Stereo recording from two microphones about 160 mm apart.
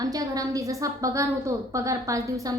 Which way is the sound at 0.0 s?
25° right (ahead or behind).